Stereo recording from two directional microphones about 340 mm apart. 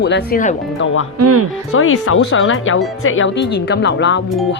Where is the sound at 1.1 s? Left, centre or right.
Right.